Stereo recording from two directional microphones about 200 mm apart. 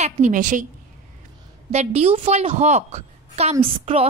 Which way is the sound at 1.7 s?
30° right (ahead or behind).